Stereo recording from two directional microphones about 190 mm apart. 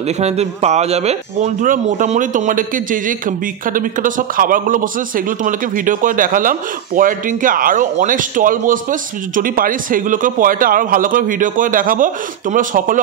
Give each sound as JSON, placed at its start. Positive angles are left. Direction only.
{"t": 0.2, "sound": "speech", "side_deg": -35}